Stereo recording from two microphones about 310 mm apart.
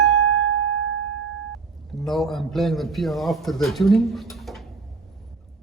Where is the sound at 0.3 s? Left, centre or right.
Right.